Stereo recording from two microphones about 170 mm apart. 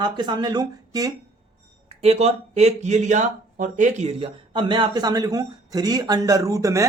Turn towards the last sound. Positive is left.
turn(degrees=-20)  # may be behind; listen again after turning